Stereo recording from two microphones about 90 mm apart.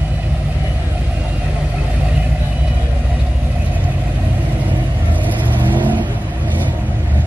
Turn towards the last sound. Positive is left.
turn(degrees=-20)  # may be behind; listen again after turning